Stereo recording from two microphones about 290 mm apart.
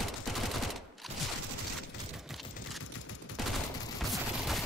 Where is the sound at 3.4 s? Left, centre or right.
Centre.